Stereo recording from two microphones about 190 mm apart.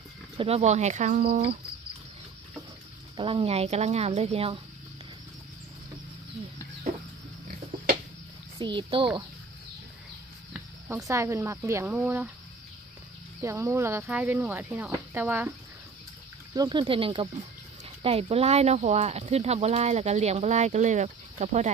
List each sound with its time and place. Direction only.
0.4 s speech: 35° right (ahead or behind)
3.2 s speech: 30° right (ahead or behind)
8.5 s speech: 25° right (ahead or behind)
10.5 s speech: 15° right (ahead or behind)
13.4 s speech: 15° right (ahead or behind)
16.5 s speech: 25° right (ahead or behind)